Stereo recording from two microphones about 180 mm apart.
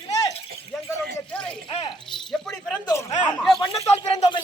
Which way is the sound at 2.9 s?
15° left (ahead or behind).